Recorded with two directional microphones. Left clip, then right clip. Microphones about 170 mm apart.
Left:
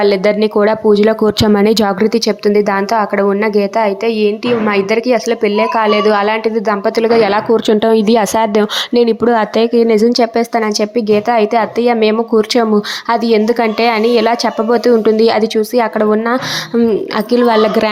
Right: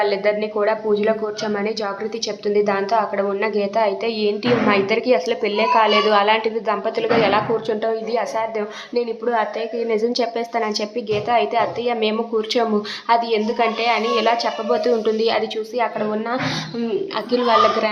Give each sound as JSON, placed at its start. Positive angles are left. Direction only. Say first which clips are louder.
{"t": 0.0, "sound": "a woman's voice", "louder": "left 8 dB", "side_deg": 40}